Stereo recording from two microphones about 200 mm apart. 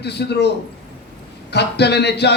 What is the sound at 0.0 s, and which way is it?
Speech, 55° left (ahead or behind).